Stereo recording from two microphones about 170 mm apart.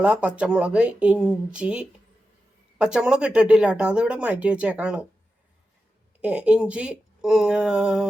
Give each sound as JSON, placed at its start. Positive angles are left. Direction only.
{"t": 0.0, "sound": "speech", "side_deg": -10}
{"t": 6.2, "sound": "speech", "side_deg": -5}